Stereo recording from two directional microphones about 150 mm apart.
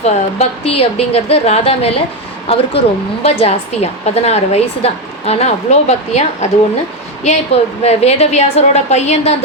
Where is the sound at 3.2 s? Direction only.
45° left (ahead or behind).